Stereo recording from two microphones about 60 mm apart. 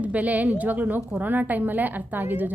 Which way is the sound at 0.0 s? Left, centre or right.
Right.